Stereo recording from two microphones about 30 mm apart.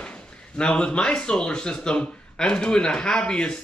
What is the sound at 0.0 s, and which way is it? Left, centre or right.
A man's voice, left.